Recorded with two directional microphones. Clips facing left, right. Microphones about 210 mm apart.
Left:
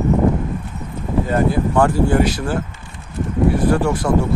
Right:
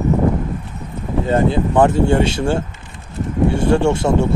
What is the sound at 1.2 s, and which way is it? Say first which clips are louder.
Speech: right 2 dB; 25° right (ahead or behind).